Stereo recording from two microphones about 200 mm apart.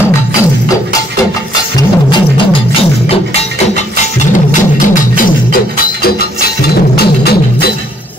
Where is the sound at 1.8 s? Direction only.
20° left (ahead or behind).